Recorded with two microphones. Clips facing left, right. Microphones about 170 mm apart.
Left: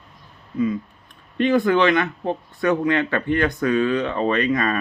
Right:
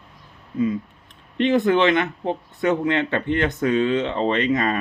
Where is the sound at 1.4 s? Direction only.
20° right (ahead or behind).